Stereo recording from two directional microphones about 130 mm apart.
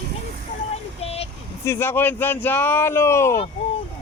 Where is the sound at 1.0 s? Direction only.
50° left (ahead or behind).